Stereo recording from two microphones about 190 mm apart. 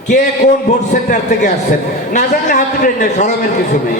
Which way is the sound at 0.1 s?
40° left (ahead or behind).